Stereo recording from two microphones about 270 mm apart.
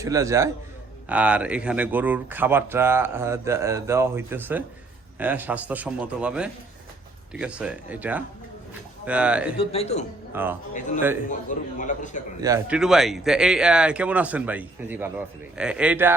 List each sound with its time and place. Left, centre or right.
0.0 s speech: centre
9.6 s a man's voice: left
10.4 s speech: centre
10.8 s a man's voice: left
12.4 s speech: centre